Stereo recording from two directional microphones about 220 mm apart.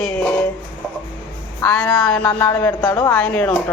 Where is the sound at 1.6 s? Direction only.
10° left (ahead or behind).